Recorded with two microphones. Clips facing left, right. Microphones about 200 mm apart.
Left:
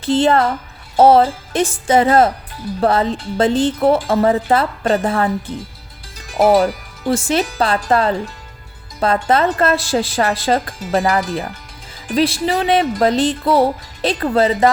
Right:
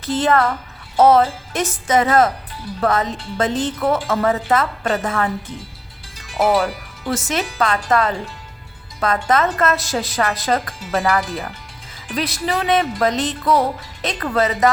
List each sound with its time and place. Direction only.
0.0 s speech: 30° left (ahead or behind)
10.8 s speech: 40° left (ahead or behind)
12.1 s speech: 30° left (ahead or behind)